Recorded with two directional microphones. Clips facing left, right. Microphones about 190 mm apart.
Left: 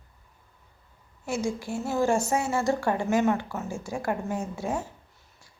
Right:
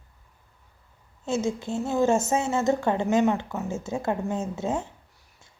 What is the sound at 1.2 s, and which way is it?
A woman's voice, 25° right (ahead or behind).